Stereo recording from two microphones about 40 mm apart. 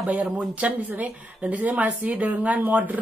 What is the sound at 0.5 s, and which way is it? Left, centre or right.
A woman's voice, right.